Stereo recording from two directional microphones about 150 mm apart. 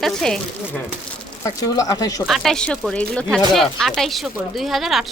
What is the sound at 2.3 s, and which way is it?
Speech, 5° left (ahead or behind).